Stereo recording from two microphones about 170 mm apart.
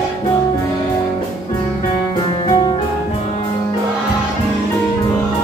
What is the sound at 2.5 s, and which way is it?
Music, 30° left (ahead or behind).